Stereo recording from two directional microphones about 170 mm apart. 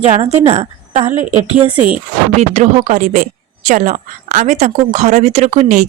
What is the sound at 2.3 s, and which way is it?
A woman's voice, 40° right (ahead or behind).